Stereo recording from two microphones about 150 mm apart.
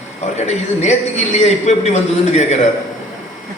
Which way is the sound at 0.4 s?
50° left (ahead or behind).